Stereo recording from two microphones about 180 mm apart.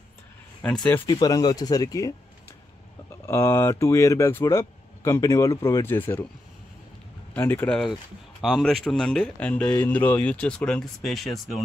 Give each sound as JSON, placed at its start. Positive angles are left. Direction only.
{"t": 0.8, "sound": "speech", "side_deg": 10}
{"t": 3.3, "sound": "speech", "side_deg": 15}
{"t": 7.3, "sound": "speech", "side_deg": 10}